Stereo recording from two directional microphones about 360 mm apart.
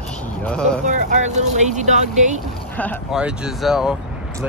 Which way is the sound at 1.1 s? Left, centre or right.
Centre.